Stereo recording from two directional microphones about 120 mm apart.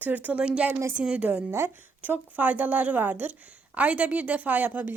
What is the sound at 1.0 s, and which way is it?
A woman's voice, 10° right (ahead or behind).